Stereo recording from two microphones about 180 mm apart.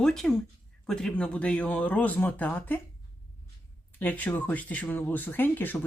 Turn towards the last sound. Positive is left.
turn(degrees=10)  # may be behind; listen again after turning